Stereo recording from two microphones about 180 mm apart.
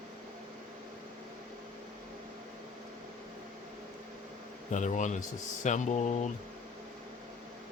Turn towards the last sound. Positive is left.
turn(degrees=40)  # may be behind; listen again after turning